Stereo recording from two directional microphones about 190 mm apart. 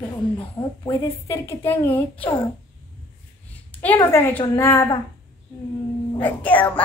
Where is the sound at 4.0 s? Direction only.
15° left (ahead or behind).